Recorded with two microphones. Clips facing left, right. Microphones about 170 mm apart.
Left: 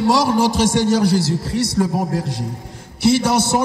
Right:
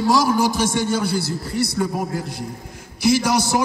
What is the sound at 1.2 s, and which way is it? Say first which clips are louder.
Speech: left 3 dB; 90° left.